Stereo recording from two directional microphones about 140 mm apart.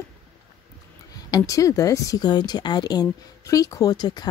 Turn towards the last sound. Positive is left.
turn(degrees=30)  # may be behind; listen again after turning